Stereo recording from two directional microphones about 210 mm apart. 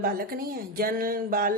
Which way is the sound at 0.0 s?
45° right (ahead or behind).